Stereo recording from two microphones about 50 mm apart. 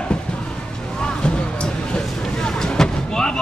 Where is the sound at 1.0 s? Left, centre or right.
Centre.